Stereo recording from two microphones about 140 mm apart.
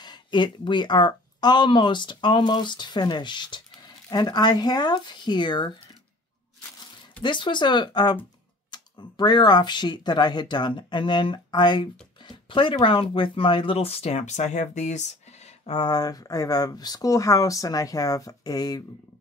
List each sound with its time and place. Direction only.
0.0 s speech: 30° left (ahead or behind)
7.2 s speech: 35° left (ahead or behind)
15.8 s speech: 30° left (ahead or behind)